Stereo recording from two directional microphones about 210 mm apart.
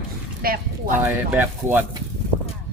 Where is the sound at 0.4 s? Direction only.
45° right (ahead or behind).